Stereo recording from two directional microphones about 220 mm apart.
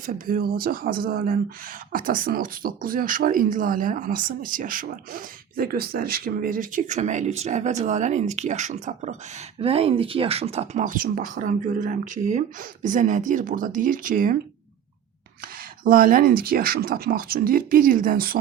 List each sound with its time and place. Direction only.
0.0 s speech: 40° right (ahead or behind)
15.8 s speech: 40° right (ahead or behind)